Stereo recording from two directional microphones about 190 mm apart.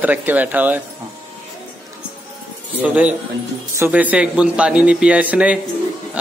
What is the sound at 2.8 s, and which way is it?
A man's voice, 5° right (ahead or behind).